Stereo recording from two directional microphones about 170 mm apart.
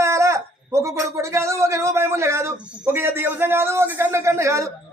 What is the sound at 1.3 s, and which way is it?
A man's voice, 15° right (ahead or behind).